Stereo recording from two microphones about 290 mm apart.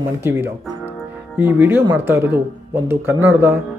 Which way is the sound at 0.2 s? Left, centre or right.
Centre.